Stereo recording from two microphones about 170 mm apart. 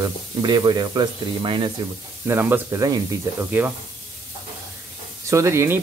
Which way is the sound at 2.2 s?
10° right (ahead or behind).